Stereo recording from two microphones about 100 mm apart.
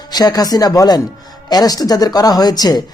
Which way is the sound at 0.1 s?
40° left (ahead or behind).